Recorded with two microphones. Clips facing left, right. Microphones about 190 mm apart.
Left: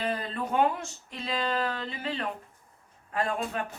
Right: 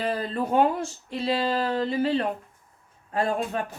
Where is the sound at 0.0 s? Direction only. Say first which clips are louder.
Right 4 dB; 35° right (ahead or behind).